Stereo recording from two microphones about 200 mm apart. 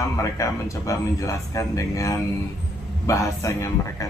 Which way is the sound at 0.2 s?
15° left (ahead or behind).